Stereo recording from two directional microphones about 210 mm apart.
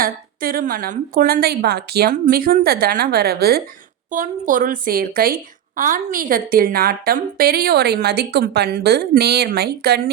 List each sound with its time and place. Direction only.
0.0 s a woman's voice: 45° right (ahead or behind)